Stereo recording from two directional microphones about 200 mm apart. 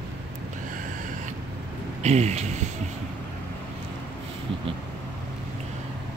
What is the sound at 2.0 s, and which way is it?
Speech, 35° right (ahead or behind).